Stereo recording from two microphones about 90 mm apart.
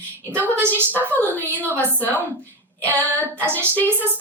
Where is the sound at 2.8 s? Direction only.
20° left (ahead or behind).